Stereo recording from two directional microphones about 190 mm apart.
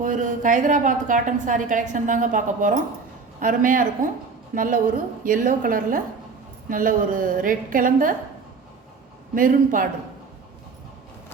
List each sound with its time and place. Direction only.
0.0 s a woman's voice: 40° right (ahead or behind)
9.3 s a woman's voice: 45° right (ahead or behind)